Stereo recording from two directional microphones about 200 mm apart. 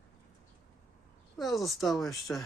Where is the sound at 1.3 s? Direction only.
Centre (ahead or behind).